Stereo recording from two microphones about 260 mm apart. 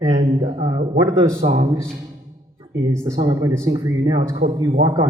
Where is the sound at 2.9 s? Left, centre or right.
Centre.